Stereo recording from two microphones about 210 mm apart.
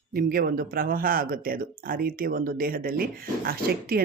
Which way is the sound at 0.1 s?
45° right (ahead or behind).